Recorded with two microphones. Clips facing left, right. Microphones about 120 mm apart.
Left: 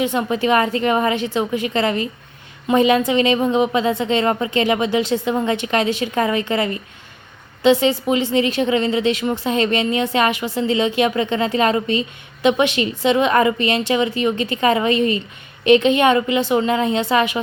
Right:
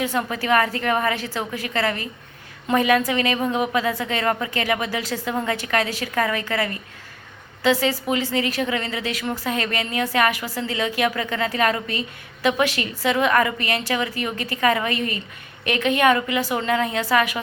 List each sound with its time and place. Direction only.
0.0 s speech: 20° left (ahead or behind)